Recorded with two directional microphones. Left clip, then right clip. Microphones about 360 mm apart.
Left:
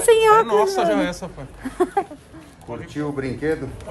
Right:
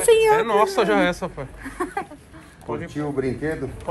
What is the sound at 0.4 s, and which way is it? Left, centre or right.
Speech, centre.